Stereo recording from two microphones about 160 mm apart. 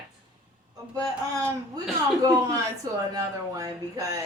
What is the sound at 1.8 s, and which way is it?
A man's voice, 25° right (ahead or behind).